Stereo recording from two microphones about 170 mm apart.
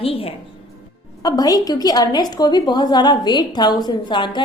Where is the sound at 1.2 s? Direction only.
25° left (ahead or behind).